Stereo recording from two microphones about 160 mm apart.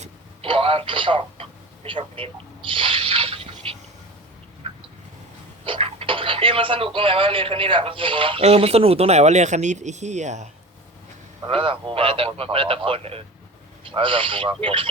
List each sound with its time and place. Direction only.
0.4 s speech: 35° right (ahead or behind)
4.6 s a sound: 35° right (ahead or behind)
5.6 s speech: 35° right (ahead or behind)
11.4 s speech: 35° right (ahead or behind)